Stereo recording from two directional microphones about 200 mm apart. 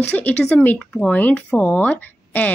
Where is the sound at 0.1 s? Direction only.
10° left (ahead or behind).